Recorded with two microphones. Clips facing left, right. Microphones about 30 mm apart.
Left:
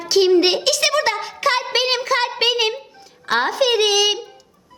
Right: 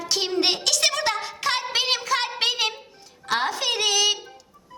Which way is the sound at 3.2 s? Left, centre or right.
Centre.